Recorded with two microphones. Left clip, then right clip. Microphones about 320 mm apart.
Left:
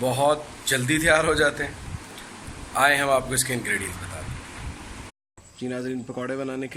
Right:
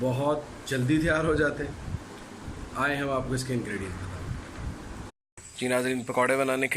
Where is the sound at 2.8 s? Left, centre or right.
Centre.